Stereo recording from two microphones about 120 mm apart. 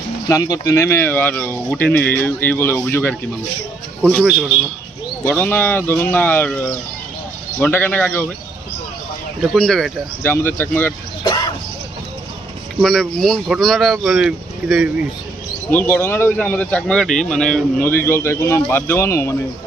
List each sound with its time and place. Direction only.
0.3 s speech: 30° left (ahead or behind); by 4.3 s 5° left (ahead or behind)
4.3 s speech: 5° right (ahead or behind)
5.2 s speech: 15° left (ahead or behind)
9.6 s speech: 5° left (ahead or behind)
10.2 s speech: 20° left (ahead or behind)
11.2 s a sound: 40° left (ahead or behind)
12.8 s speech: 5° left (ahead or behind)
15.7 s speech: 15° left (ahead or behind)
17.8 s speech: 20° left (ahead or behind)